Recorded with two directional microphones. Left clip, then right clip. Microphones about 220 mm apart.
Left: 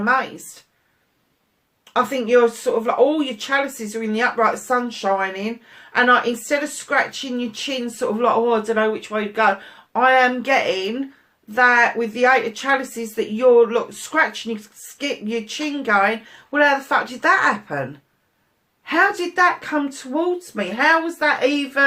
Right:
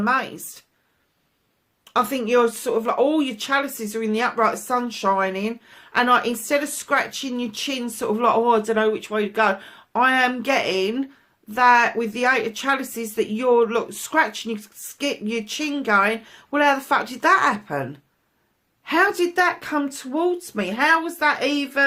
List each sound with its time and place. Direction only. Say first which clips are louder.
0.0 s speech: left 3 dB; 45° right (ahead or behind)
1.8 s speech: left 2 dB; 45° right (ahead or behind)
18.9 s speech: left 1 dB; 45° right (ahead or behind)